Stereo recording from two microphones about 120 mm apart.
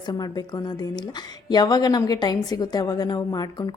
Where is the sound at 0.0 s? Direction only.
35° left (ahead or behind).